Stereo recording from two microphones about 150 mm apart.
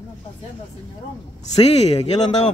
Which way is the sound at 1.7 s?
45° left (ahead or behind).